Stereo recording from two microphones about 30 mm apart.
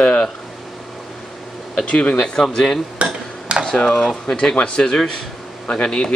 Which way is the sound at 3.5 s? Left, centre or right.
Right.